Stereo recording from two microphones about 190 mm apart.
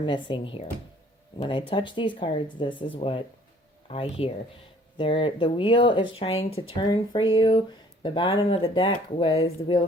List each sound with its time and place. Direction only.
0.0 s speech: 25° left (ahead or behind)